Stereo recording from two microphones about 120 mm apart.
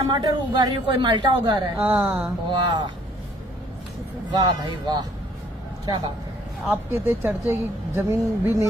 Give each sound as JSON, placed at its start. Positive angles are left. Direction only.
{"t": 0.1, "sound": "a woman's voice", "side_deg": -35}
{"t": 1.8, "sound": "a woman's voice", "side_deg": -15}
{"t": 2.6, "sound": "a woman's voice", "side_deg": -40}
{"t": 4.3, "sound": "a woman's voice", "side_deg": -35}
{"t": 6.9, "sound": "a woman's voice", "side_deg": -15}